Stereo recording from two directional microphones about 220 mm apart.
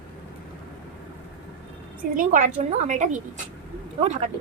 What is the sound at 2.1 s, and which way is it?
A woman's voice, 35° right (ahead or behind).